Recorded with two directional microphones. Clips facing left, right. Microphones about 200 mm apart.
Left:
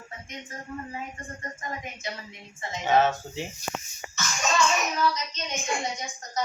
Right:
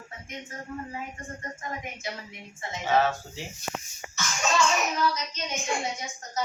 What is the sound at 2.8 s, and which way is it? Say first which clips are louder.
Speech: left 2 dB; 20° left (ahead or behind).